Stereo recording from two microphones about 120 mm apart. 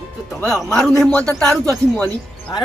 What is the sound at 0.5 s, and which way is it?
Speech, 5° left (ahead or behind).